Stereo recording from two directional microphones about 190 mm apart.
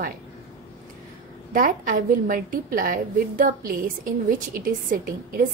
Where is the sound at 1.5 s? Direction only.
45° right (ahead or behind).